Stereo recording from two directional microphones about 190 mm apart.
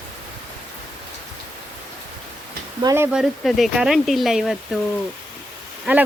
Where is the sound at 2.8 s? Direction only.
15° right (ahead or behind).